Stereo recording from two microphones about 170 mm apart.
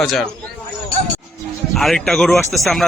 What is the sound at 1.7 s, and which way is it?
A man's voice, centre (ahead or behind).